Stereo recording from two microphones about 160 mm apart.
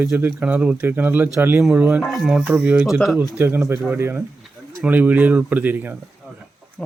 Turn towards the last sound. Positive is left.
turn(degrees=-10)  # may be behind; listen again after turning